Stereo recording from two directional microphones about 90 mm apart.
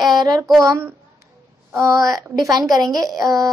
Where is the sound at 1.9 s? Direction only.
40° right (ahead or behind).